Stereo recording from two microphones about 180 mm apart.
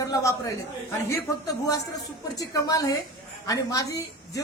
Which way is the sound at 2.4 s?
20° left (ahead or behind).